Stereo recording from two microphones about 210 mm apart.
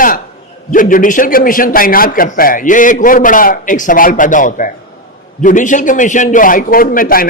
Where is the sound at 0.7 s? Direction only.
40° left (ahead or behind).